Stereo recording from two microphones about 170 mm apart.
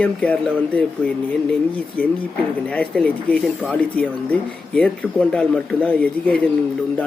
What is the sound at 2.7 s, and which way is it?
Speech, 5° left (ahead or behind).